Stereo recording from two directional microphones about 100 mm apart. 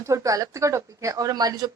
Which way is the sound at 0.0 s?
30° right (ahead or behind).